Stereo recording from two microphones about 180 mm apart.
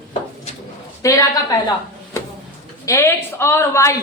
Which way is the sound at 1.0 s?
20° left (ahead or behind).